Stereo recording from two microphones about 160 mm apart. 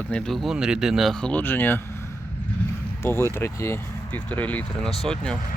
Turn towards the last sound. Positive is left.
turn(degrees=5)  # may be behind; listen again after turning